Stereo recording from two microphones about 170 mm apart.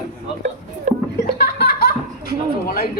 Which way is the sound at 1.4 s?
65° left (ahead or behind).